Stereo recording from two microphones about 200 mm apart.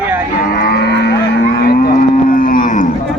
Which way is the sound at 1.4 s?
50° left (ahead or behind).